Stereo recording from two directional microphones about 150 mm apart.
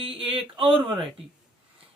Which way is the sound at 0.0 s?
35° right (ahead or behind).